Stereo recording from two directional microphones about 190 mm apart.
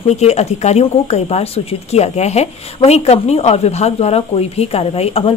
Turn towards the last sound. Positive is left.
turn(degrees=30)  # may be behind; listen again after turning